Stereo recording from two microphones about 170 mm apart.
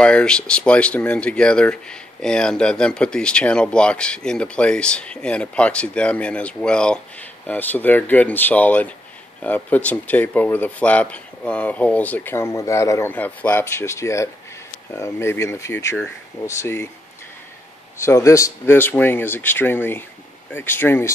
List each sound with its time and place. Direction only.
0.0 s speech: 5° left (ahead or behind)
17.9 s speech: 15° left (ahead or behind)